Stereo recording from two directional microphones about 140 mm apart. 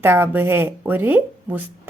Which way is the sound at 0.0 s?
15° right (ahead or behind).